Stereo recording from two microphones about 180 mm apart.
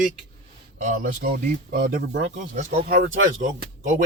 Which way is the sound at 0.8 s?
45° right (ahead or behind).